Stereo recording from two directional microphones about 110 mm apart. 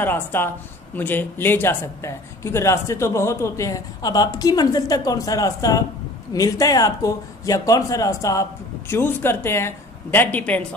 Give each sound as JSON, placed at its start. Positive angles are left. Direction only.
{"t": 0.0, "sound": "speech", "side_deg": 20}